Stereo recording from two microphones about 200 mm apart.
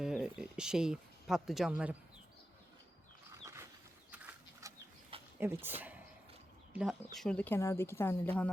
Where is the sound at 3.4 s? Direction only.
15° right (ahead or behind).